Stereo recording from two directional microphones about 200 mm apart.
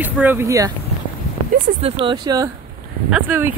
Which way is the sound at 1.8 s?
30° right (ahead or behind).